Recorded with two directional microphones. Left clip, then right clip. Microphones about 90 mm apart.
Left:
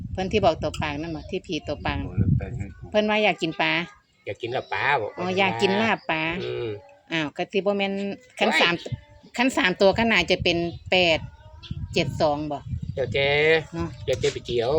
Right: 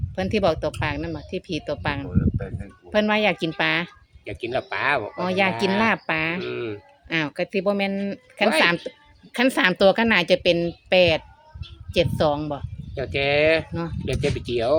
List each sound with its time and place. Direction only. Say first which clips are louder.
0.2 s speech: even; 40° right (ahead or behind)
12.9 s speech: even; 35° right (ahead or behind)